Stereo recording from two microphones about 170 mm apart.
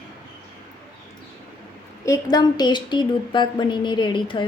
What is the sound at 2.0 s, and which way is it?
Speech, 20° left (ahead or behind).